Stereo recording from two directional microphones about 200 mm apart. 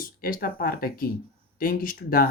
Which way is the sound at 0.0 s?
45° left (ahead or behind).